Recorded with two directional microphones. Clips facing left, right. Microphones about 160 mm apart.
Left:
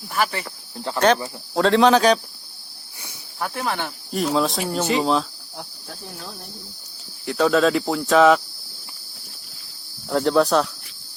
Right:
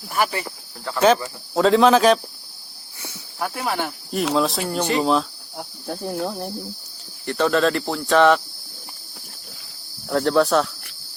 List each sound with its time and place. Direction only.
0.1 s speech: 15° right (ahead or behind)
0.9 s cricket: 5° right (ahead or behind)
3.4 s speech: 5° right (ahead or behind)
4.4 s cricket: centre (ahead or behind)
4.7 s speech: centre (ahead or behind)
5.9 s cricket: 60° right (ahead or behind)
7.3 s cricket: centre (ahead or behind)
10.1 s cricket: centre (ahead or behind)